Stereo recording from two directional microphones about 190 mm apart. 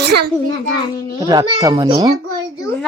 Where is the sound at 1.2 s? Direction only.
20° right (ahead or behind).